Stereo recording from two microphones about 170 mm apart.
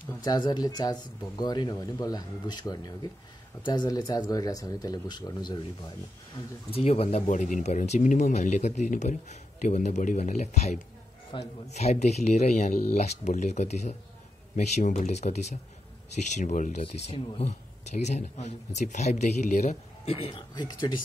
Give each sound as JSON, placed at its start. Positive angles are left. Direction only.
{"t": 0.2, "sound": "speech", "side_deg": 25}
{"t": 6.7, "sound": "a man's voice", "side_deg": 35}
{"t": 16.8, "sound": "a man's voice", "side_deg": 30}